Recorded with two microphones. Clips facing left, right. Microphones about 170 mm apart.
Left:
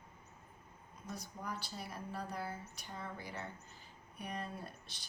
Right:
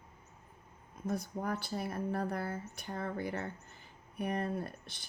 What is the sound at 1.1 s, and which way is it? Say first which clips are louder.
Speech: right 9 dB; 55° right (ahead or behind).